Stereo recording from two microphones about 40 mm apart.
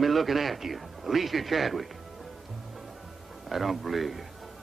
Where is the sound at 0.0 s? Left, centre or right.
Centre.